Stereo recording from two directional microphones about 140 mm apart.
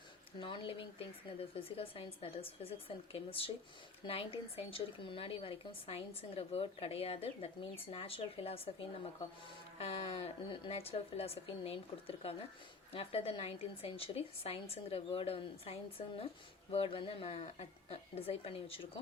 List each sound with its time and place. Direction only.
0.3 s a woman's voice: 35° left (ahead or behind)